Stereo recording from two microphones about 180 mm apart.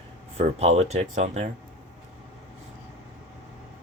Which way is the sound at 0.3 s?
35° right (ahead or behind).